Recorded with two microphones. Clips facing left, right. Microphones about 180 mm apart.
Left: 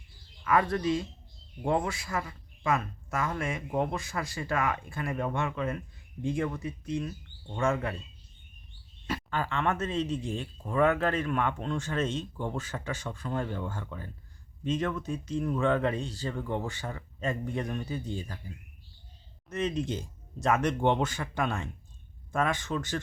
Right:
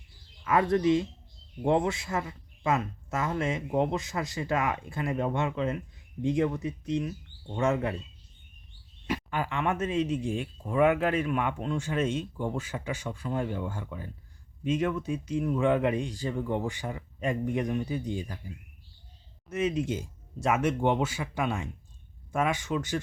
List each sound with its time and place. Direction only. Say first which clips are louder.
0.4 s a man's voice: right 3 dB; 20° right (ahead or behind)
9.0 s speech: right 1 dB; 15° right (ahead or behind)